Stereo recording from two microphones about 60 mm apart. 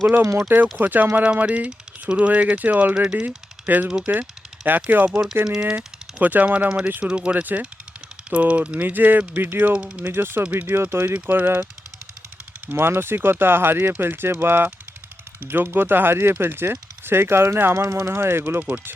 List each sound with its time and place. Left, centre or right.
0.4 s speech: right; by 3.2 s centre
3.2 s a sound: right
4.0 s speech: right
12.6 s speech: right